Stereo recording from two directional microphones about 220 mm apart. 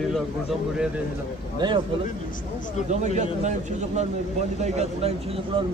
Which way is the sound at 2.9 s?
30° right (ahead or behind).